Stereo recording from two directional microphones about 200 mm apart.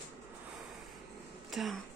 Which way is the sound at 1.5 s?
Centre (ahead or behind).